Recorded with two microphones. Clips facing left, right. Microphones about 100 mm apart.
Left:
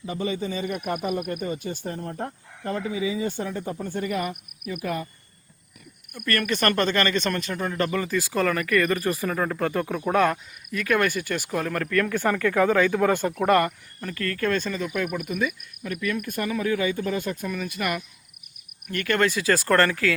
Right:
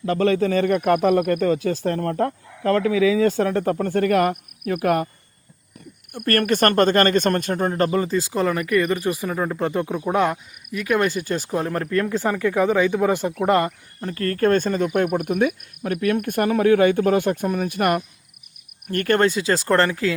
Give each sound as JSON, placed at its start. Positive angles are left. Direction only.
{"t": 0.0, "sound": "a man's voice", "side_deg": -90}
{"t": 6.2, "sound": "speech", "side_deg": -50}
{"t": 17.5, "sound": "speech", "side_deg": -50}
{"t": 19.2, "sound": "speech", "side_deg": -25}